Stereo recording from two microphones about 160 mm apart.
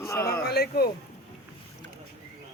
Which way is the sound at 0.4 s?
75° left (ahead or behind).